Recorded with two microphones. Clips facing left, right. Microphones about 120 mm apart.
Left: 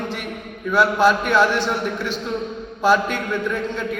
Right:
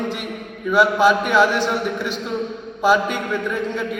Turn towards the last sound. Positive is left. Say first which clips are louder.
# right 1 dB
turn(degrees=-15)  # may be behind; listen again after turning